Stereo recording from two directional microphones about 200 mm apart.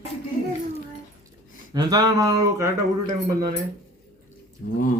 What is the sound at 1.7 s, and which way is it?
Speech, 20° right (ahead or behind).